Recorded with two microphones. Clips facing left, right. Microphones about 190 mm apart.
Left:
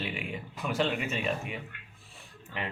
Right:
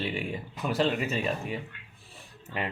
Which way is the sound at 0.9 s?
35° right (ahead or behind).